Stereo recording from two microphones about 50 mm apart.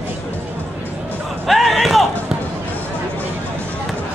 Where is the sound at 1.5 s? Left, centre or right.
Centre.